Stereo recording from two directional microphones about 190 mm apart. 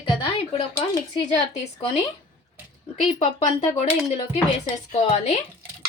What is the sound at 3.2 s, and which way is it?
Speech, 35° left (ahead or behind).